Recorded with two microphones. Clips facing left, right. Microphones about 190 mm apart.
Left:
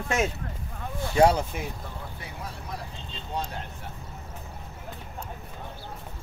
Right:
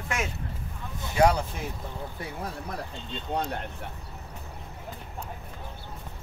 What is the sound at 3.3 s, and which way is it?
Speech, 60° right (ahead or behind).